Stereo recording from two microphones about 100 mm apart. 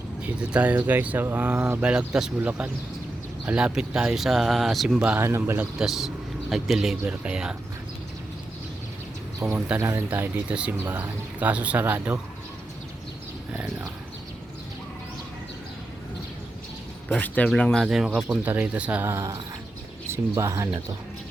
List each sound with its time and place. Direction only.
0.2 s speech: 10° right (ahead or behind)
5.0 s speech: 25° right (ahead or behind)
5.8 s speech: 5° right (ahead or behind)
9.4 s speech: 25° right (ahead or behind)
17.1 s speech: 15° left (ahead or behind)
17.6 s speech: 5° left (ahead or behind)
17.8 s speech: 5° right (ahead or behind)
18.4 s speech: 15° right (ahead or behind)
20.1 s bird: 25° right (ahead or behind)
20.4 s speech: 30° right (ahead or behind)